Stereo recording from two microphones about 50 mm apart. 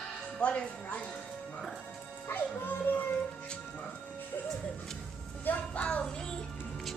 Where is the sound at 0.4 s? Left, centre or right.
Left.